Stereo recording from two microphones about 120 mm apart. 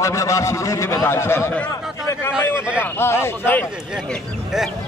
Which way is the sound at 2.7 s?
20° left (ahead or behind).